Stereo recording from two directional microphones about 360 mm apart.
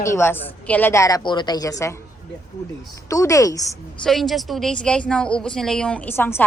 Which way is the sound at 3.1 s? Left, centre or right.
Centre.